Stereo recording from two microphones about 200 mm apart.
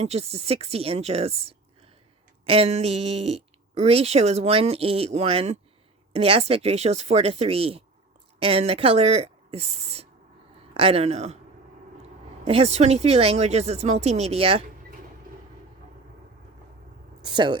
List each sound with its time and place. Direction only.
0.0 s speech: 30° right (ahead or behind)
12.5 s speech: 30° right (ahead or behind)
17.2 s speech: 20° right (ahead or behind)